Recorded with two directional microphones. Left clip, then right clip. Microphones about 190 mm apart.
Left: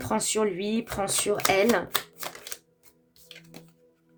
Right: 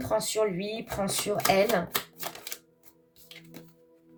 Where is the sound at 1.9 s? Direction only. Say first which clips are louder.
Left 2 dB; 25° left (ahead or behind).